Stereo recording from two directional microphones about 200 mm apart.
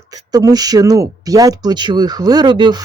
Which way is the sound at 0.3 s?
20° right (ahead or behind).